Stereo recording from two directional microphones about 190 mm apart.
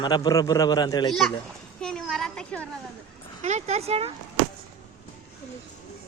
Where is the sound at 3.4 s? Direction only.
35° right (ahead or behind).